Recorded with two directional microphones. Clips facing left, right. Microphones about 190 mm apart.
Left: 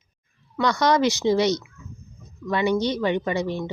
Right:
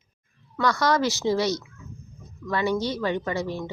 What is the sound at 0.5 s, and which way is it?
A woman's voice, 20° left (ahead or behind).